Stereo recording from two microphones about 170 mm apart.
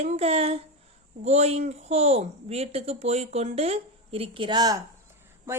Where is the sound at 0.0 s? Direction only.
35° right (ahead or behind).